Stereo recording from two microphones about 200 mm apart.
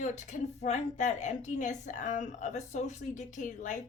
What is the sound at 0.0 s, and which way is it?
A woman's voice, 35° left (ahead or behind).